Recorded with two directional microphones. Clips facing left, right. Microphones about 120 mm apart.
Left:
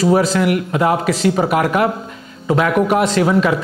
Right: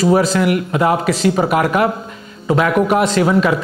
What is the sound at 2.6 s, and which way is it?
Speech, 20° right (ahead or behind).